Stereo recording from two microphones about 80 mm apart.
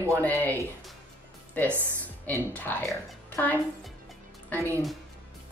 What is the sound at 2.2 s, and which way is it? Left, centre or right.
A woman's voice, left.